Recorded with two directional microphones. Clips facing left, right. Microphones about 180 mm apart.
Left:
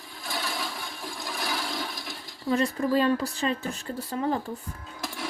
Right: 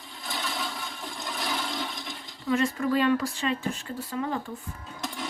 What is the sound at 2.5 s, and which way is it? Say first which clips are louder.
Speech: left 1 dB; 35° left (ahead or behind).